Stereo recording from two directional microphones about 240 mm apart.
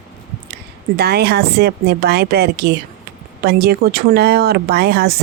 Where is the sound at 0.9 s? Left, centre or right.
Right.